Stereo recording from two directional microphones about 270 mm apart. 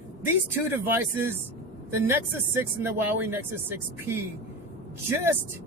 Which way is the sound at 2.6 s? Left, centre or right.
Centre.